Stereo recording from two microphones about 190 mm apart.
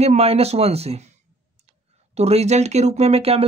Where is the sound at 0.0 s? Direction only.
35° right (ahead or behind).